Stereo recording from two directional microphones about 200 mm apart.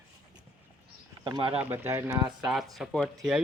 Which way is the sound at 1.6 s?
10° right (ahead or behind).